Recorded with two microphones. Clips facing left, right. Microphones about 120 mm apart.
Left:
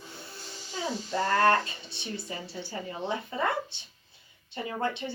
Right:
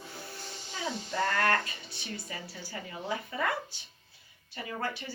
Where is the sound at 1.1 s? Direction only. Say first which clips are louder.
Left 5 dB; 25° left (ahead or behind).